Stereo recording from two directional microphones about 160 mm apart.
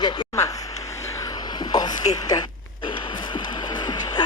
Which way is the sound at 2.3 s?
25° left (ahead or behind).